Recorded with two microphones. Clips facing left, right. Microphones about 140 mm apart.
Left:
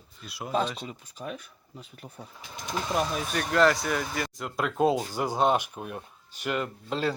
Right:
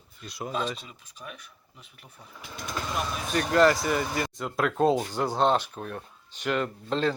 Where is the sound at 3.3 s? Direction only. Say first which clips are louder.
Right 2 dB; centre (ahead or behind).